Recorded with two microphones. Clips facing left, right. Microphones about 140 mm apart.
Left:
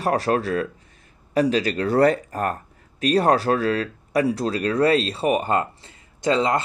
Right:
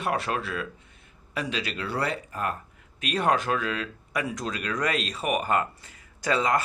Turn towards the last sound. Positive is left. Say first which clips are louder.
# left 4 dB
turn(degrees=25)  # may be behind; listen again after turning